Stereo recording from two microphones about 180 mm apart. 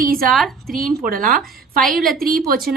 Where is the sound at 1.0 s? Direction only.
50° right (ahead or behind).